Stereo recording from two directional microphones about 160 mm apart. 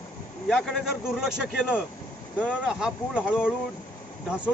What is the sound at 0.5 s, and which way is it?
Speech, centre (ahead or behind).